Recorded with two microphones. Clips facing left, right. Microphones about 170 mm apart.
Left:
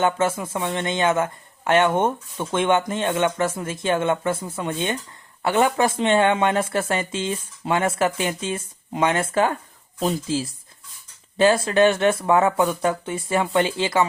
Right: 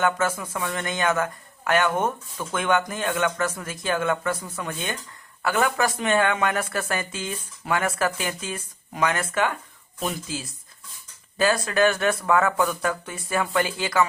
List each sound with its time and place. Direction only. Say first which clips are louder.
0.0 s speech: left 3 dB; 25° left (ahead or behind)